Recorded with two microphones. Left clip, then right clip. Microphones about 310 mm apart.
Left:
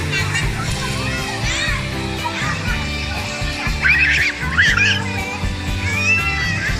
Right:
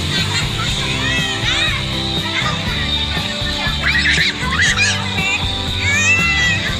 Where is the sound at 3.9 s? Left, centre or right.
Centre.